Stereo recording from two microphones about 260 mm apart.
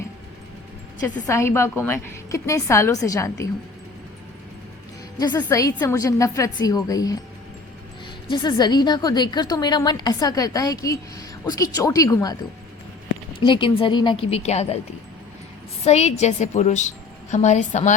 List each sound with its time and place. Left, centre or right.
1.0 s a woman's voice: centre
5.2 s a woman's voice: centre
8.3 s a woman's voice: centre
13.4 s a woman's voice: centre
15.8 s a woman's voice: left